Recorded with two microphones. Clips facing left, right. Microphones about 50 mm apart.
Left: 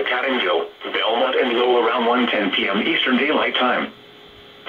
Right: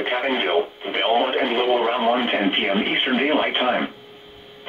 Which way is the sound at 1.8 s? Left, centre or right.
Left.